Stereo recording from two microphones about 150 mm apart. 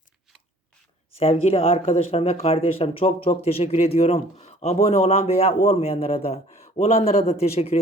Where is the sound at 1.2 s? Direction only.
40° left (ahead or behind).